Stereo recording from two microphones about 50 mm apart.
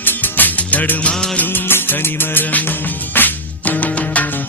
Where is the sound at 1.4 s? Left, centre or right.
Left.